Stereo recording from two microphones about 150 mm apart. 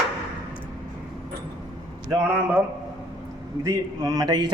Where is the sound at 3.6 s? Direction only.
25° right (ahead or behind).